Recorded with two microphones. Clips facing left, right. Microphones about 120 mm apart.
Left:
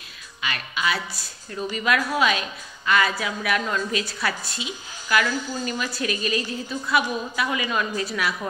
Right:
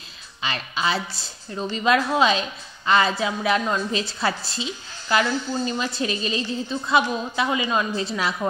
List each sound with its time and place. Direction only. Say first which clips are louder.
0.4 s a woman's voice: right 2 dB; 30° right (ahead or behind)